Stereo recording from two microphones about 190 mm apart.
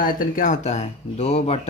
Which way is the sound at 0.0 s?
45° left (ahead or behind).